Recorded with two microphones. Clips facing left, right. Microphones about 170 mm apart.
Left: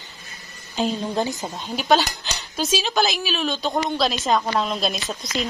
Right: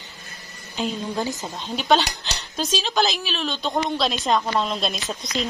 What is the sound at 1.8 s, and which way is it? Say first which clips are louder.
A woman's voice: left 1 dB; 5° left (ahead or behind).